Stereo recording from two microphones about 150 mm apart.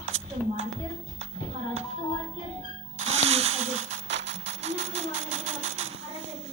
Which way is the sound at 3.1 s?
45° right (ahead or behind).